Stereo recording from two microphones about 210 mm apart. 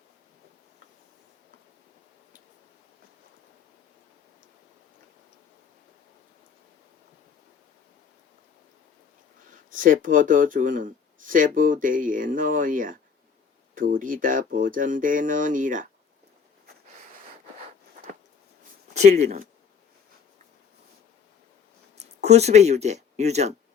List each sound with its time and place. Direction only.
9.5 s speech: 40° right (ahead or behind)
18.9 s speech: 30° right (ahead or behind)
21.9 s speech: 30° right (ahead or behind)